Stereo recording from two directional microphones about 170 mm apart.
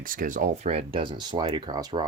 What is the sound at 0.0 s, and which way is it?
Speech, 55° right (ahead or behind).